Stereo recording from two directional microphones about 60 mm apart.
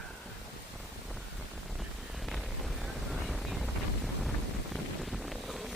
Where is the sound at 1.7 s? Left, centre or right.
Centre.